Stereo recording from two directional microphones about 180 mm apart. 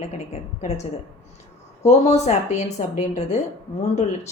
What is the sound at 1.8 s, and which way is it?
Speech, 40° left (ahead or behind).